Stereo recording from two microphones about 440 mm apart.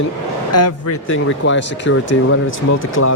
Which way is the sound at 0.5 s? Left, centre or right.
Left.